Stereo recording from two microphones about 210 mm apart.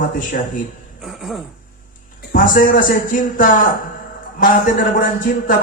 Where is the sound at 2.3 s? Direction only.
40° left (ahead or behind).